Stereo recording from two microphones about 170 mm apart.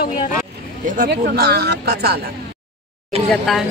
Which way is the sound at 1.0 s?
60° right (ahead or behind).